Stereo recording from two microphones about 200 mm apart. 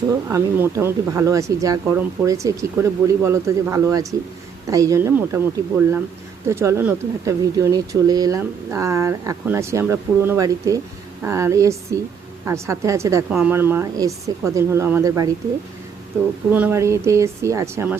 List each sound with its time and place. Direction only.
0.3 s speech: 15° right (ahead or behind)
16.5 s speech: 10° right (ahead or behind)